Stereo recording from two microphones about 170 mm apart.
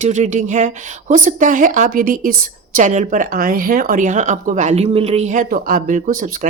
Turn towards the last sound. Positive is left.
turn(degrees=-50)  # may be behind; listen again after turning